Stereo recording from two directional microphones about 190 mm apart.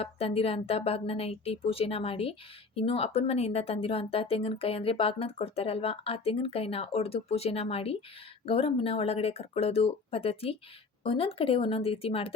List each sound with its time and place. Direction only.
0.0 s speech: 30° left (ahead or behind)